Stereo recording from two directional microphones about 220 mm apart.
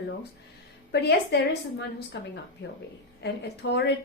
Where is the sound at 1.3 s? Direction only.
50° left (ahead or behind).